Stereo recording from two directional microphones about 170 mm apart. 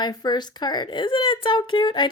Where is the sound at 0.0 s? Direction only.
25° left (ahead or behind).